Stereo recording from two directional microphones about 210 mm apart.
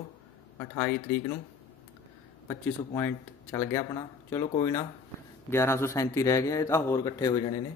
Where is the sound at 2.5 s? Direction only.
10° left (ahead or behind).